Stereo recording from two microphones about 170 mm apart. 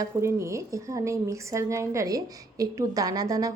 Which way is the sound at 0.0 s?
15° right (ahead or behind).